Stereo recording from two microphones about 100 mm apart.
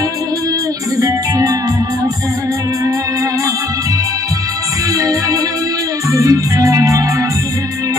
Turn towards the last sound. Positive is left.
turn(degrees=-35)  # may be behind; listen again after turning